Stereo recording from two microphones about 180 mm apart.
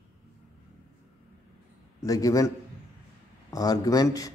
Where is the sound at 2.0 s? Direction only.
20° left (ahead or behind).